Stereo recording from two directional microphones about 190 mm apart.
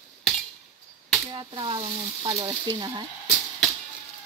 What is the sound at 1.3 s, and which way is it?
Speech, 25° right (ahead or behind).